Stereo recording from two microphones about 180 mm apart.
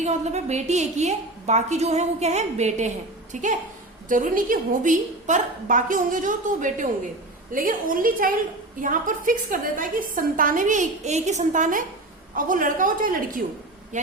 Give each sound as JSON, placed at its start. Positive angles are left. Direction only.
{"t": 0.0, "sound": "a woman's voice", "side_deg": -40}